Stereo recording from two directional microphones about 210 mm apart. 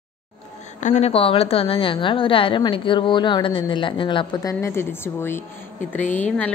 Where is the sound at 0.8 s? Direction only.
35° left (ahead or behind).